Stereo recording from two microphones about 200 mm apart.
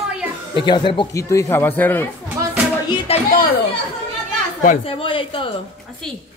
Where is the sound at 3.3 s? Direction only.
50° left (ahead or behind).